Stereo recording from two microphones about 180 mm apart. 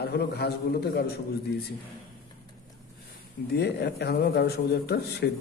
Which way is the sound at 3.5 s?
65° left (ahead or behind).